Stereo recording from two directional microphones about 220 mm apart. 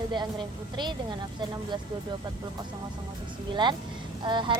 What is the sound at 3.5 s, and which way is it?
A woman's voice, 20° right (ahead or behind).